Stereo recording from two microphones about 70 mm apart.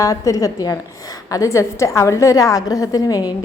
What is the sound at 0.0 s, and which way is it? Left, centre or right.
A woman's voice, left.